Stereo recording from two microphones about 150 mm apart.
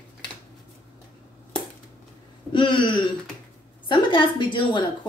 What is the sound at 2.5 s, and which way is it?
A woman's voice, 35° left (ahead or behind).